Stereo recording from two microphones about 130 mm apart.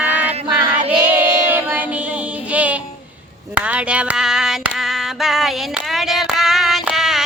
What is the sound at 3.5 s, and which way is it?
Female singing, 10° right (ahead or behind).